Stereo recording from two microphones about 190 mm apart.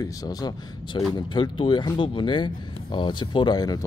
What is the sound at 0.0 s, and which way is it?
Speech, 20° left (ahead or behind).